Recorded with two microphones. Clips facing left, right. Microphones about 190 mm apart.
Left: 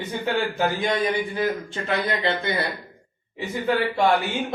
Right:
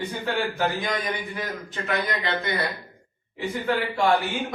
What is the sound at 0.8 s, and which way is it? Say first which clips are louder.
A man's voice: left 5 dB; 30° left (ahead or behind).